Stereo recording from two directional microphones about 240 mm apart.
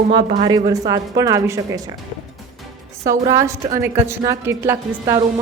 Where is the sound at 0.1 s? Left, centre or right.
Right.